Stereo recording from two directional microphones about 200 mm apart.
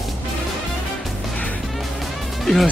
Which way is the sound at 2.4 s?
Centre (ahead or behind).